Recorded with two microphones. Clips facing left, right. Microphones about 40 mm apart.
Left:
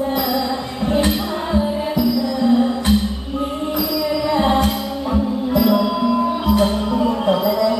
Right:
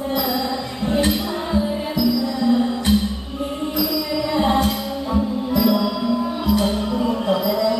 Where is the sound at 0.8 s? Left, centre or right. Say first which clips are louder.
Left 2 dB; centre.